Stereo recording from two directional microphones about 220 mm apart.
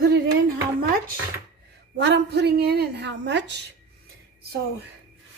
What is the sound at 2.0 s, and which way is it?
A woman's voice, 55° right (ahead or behind).